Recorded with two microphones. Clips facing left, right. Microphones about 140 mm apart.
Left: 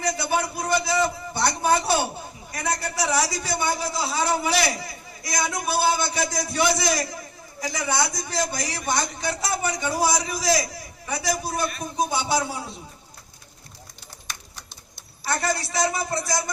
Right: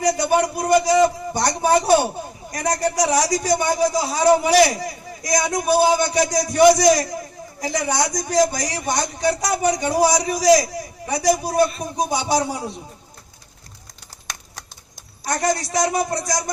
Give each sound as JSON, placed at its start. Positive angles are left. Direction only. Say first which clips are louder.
{"t": 0.0, "sound": "a sound", "louder": "right 7 dB", "side_deg": -40}
{"t": 1.7, "sound": "a man's voice", "louder": "right 6 dB", "side_deg": -40}
{"t": 15.2, "sound": "a man's voice", "louder": "right 4 dB", "side_deg": -45}